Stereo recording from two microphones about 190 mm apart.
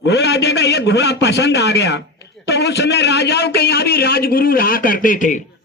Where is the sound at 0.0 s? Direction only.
60° left (ahead or behind); by 5.4 s 45° left (ahead or behind).